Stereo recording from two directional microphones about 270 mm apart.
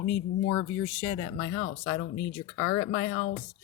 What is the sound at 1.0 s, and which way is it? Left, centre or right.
Speech, left.